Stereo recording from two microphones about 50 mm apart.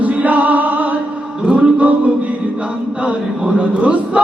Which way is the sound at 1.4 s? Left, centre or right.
Right.